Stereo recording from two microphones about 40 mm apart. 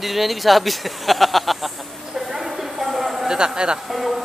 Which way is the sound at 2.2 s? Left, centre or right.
Centre.